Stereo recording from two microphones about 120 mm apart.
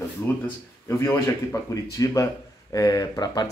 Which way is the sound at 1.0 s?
25° left (ahead or behind).